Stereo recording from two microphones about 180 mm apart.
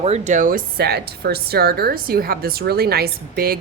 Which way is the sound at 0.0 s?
40° right (ahead or behind).